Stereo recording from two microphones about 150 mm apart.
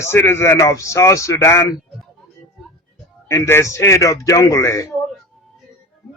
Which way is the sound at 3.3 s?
15° left (ahead or behind).